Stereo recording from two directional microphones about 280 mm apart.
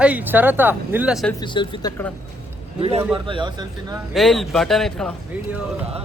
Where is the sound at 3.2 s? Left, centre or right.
Centre.